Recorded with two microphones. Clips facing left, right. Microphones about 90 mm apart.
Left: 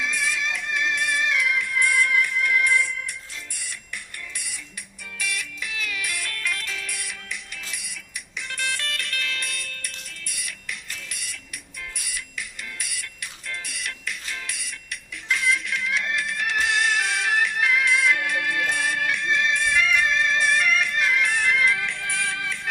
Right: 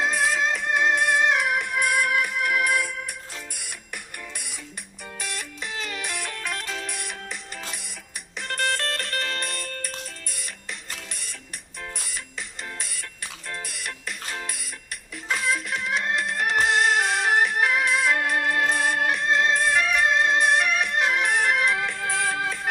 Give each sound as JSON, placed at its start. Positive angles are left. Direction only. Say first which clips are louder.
{"t": 0.3, "sound": "music", "louder": "right 4 dB", "side_deg": -40}
{"t": 1.4, "sound": "music", "louder": "even", "side_deg": -60}
{"t": 5.1, "sound": "music", "louder": "left 3 dB", "side_deg": -35}
{"t": 6.1, "sound": "music", "louder": "even", "side_deg": -45}